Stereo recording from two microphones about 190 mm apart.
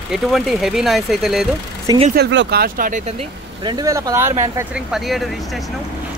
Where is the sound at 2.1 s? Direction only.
65° right (ahead or behind); by 3.1 s 45° right (ahead or behind).